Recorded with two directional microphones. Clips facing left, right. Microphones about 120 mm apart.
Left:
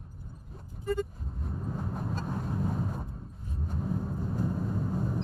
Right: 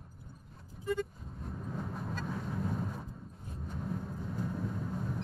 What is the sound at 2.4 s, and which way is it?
Vehicle, 5° left (ahead or behind).